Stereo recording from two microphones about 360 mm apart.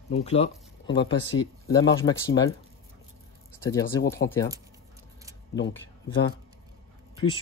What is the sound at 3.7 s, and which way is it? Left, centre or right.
Speech, centre.